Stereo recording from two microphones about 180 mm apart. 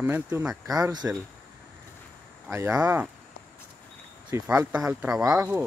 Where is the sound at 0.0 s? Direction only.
10° right (ahead or behind).